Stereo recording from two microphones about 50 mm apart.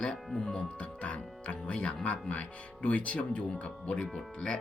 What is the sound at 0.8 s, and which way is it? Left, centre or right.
Music, left.